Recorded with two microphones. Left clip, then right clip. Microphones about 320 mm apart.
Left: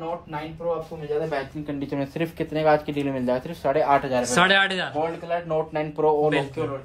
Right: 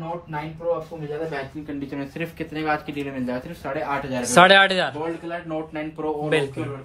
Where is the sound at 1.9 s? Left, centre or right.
Left.